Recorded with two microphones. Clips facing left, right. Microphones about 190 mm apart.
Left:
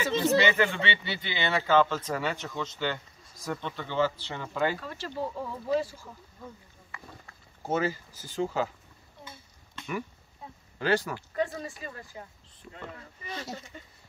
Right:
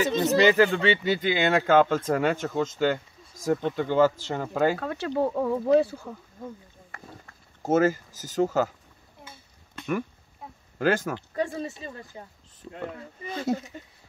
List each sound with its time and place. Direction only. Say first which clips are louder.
0.2 s speech: right 5 dB; 40° right (ahead or behind)
4.7 s speech: right 8 dB; 60° right (ahead or behind)
6.9 s a sound: right 1 dB; 45° right (ahead or behind)
7.6 s speech: right 7 dB; 45° right (ahead or behind)
10.8 s speech: right 3 dB; 45° right (ahead or behind)
11.1 s speech: right 2 dB; 25° right (ahead or behind)
12.7 s speech: right 8 dB; 55° right (ahead or behind)